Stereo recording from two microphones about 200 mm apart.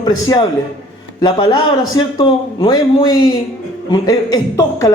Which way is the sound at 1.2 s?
25° left (ahead or behind).